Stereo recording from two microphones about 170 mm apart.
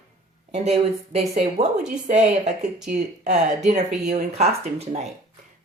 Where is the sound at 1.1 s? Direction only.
40° right (ahead or behind).